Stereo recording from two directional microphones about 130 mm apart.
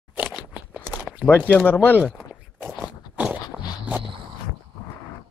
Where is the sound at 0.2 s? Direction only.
5° right (ahead or behind).